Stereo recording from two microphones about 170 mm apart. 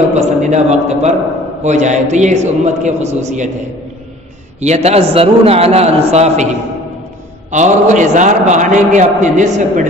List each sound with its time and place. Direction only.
0.1 s a man's voice: 40° right (ahead or behind)
4.6 s a man's voice: 40° right (ahead or behind)
7.5 s a man's voice: 45° right (ahead or behind)